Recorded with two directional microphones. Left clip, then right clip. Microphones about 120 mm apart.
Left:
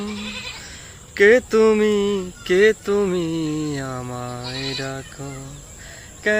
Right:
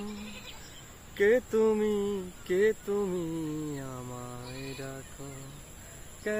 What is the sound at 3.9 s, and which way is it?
Speech, 10° right (ahead or behind).